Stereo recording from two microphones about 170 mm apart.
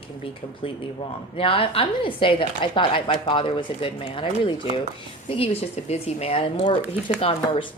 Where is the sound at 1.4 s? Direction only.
35° left (ahead or behind).